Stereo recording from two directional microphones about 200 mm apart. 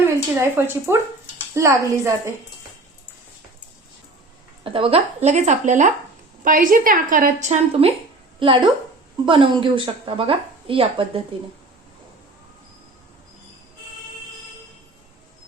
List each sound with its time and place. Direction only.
0.0 s a woman's voice: 10° right (ahead or behind)
4.6 s a woman's voice: 25° right (ahead or behind)